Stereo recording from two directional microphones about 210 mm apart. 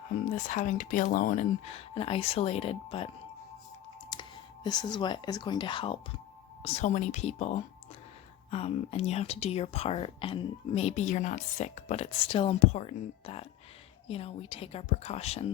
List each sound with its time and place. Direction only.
0.1 s speech: 35° left (ahead or behind)
4.1 s speech: 20° left (ahead or behind)